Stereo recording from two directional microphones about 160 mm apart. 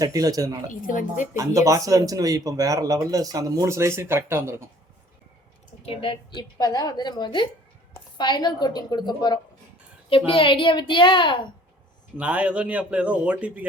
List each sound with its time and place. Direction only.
0.0 s speech: 25° right (ahead or behind)
0.7 s a woman's voice: 55° left (ahead or behind)
1.4 s speech: 20° right (ahead or behind)
5.8 s a woman's voice: 35° left (ahead or behind)
12.1 s speech: 10° right (ahead or behind)